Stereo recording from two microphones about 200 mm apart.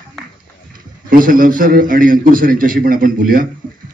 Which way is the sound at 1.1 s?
45° right (ahead or behind).